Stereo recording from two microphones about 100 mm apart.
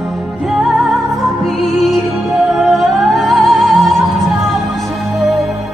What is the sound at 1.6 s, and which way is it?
Music, centre (ahead or behind).